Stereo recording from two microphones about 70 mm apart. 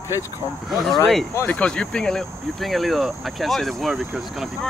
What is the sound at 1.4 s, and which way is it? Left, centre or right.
Speech, centre.